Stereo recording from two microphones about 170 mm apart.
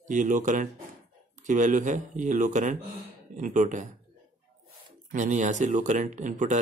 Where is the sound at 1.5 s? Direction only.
50° right (ahead or behind).